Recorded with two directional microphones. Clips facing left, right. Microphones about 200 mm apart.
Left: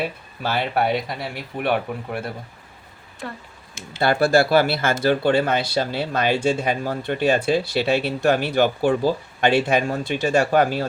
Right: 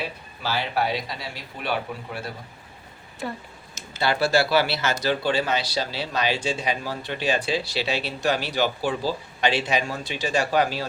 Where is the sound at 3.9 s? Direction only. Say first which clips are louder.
Left 4 dB; 50° left (ahead or behind).